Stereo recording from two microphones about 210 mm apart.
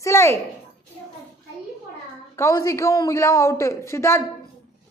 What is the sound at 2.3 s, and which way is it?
A woman's voice, 15° left (ahead or behind).